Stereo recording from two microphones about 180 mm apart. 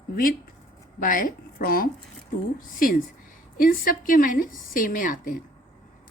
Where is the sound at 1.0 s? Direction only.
50° left (ahead or behind).